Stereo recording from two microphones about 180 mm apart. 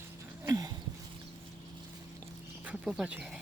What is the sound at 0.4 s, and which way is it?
Dog, 20° right (ahead or behind).